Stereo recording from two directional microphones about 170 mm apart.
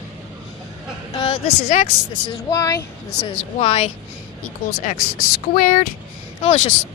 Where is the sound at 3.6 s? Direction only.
35° left (ahead or behind).